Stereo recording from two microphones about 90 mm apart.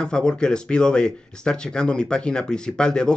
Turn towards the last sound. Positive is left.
turn(degrees=10)  # may be behind; listen again after turning